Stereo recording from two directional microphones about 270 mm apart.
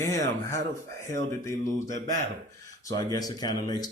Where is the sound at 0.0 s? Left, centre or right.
Centre.